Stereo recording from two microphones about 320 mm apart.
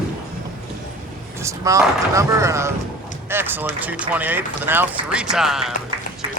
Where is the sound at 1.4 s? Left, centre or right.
Centre.